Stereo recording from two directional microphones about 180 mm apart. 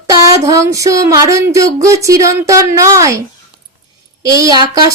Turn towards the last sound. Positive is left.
turn(degrees=-20)  # may be behind; listen again after turning